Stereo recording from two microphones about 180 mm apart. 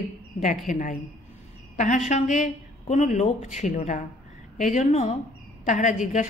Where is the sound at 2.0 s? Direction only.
40° left (ahead or behind).